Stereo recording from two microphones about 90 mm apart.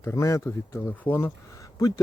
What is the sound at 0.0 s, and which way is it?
A man's voice, 30° left (ahead or behind).